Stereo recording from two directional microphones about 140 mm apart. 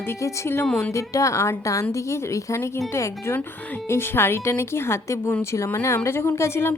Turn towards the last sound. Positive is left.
turn(degrees=20)  # may be behind; listen again after turning